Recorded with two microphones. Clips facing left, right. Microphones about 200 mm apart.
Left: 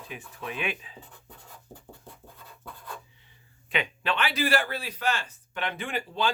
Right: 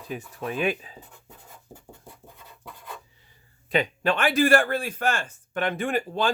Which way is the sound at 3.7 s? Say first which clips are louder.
Right 6 dB; 40° right (ahead or behind).